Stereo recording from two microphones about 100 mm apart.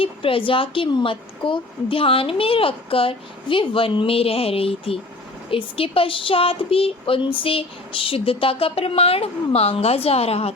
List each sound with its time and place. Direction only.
0.0 s a woman's voice: 65° left (ahead or behind); by 10.5 s 85° left